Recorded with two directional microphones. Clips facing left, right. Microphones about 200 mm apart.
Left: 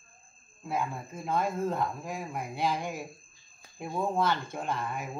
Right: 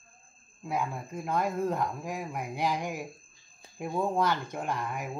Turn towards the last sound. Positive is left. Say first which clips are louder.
# even
turn(degrees=-15)  # may be behind; listen again after turning